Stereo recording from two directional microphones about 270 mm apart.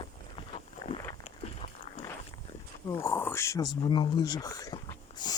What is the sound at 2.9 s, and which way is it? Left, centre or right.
Speech, centre.